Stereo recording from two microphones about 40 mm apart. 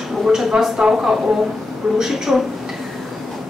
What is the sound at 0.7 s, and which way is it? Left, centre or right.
A woman's voice, centre.